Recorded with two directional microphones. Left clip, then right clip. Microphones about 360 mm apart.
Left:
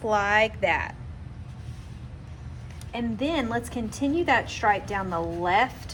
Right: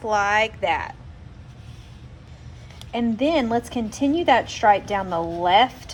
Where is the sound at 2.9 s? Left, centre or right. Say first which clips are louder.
Right 7 dB; right.